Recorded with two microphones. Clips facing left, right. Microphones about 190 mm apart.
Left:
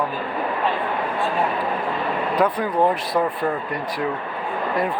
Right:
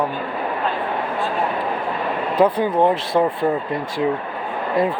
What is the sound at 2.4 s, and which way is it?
Speech, 25° right (ahead or behind).